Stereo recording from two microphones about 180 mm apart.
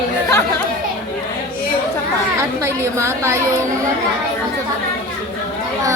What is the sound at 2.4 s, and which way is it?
A woman's voice, 15° right (ahead or behind).